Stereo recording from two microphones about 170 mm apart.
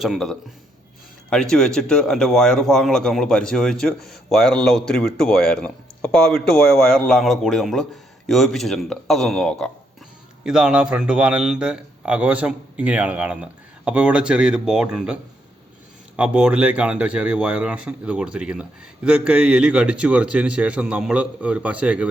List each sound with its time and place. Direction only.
0.0 s a man's voice: centre (ahead or behind)